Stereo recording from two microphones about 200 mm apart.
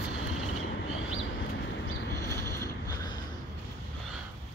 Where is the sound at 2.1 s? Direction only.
15° left (ahead or behind).